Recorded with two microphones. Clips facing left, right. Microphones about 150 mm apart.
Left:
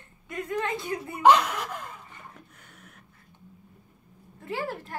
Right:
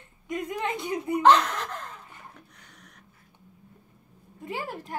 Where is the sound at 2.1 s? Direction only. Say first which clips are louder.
Left 1 dB; 5° left (ahead or behind).